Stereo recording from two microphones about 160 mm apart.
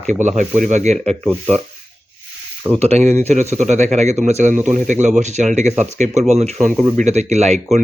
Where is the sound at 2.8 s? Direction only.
45° right (ahead or behind).